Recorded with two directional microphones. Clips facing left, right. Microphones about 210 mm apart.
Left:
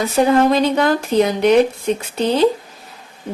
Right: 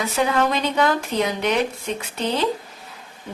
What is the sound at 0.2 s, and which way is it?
Speech, 40° left (ahead or behind).